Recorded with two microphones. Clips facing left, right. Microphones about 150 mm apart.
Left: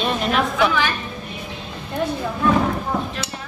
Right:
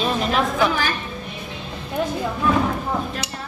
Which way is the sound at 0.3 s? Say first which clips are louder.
Left 2 dB; 40° right (ahead or behind).